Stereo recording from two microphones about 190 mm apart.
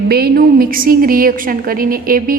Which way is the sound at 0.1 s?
55° right (ahead or behind).